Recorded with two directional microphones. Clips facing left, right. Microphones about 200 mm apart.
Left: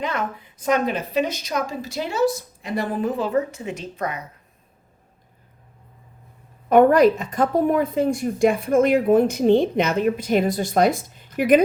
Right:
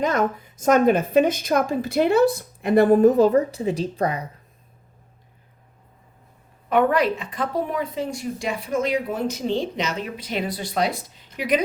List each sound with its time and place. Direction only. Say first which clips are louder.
0.0 s a woman's voice: right 5 dB; 40° right (ahead or behind)
6.7 s speech: left 6 dB; 45° left (ahead or behind)